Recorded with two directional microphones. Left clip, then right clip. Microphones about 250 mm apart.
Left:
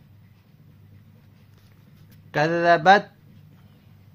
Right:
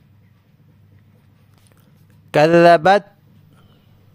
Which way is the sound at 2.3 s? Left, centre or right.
Right.